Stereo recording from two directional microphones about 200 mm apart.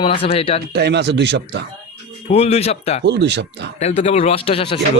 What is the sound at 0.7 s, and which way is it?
Speech, 55° right (ahead or behind).